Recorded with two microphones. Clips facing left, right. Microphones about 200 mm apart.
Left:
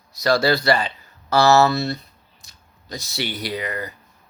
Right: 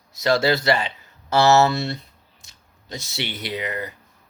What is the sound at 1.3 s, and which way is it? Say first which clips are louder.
Speech: left 1 dB; 25° right (ahead or behind).